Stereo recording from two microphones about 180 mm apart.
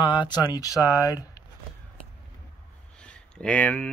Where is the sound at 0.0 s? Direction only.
25° left (ahead or behind).